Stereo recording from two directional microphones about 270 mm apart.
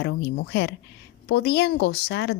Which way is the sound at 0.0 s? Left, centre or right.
Left.